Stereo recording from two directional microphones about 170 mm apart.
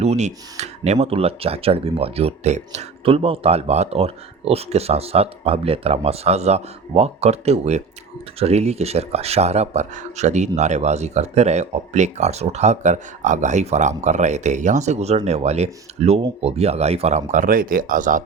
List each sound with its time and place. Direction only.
0.0 s speech: 40° right (ahead or behind)